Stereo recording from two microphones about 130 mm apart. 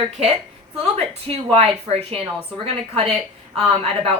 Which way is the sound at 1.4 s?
50° right (ahead or behind).